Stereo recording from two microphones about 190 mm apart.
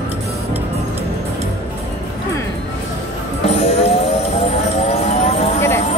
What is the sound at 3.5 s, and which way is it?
Music, 30° left (ahead or behind).